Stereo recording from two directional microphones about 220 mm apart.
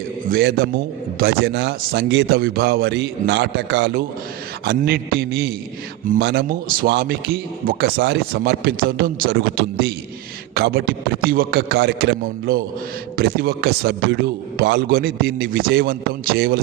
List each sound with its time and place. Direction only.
0.3 s a man's voice: 45° right (ahead or behind)